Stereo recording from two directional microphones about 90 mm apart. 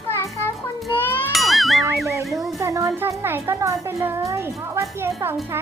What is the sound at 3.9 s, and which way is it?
Speech, 30° right (ahead or behind).